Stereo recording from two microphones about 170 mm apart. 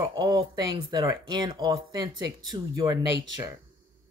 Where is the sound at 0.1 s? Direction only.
25° right (ahead or behind).